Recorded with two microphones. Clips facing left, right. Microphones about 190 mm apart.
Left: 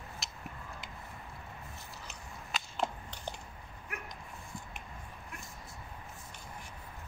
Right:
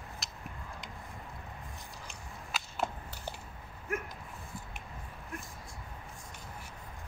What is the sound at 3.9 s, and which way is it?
Dog, 45° right (ahead or behind).